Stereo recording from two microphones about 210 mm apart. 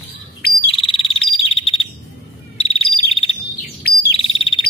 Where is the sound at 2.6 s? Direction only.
25° left (ahead or behind).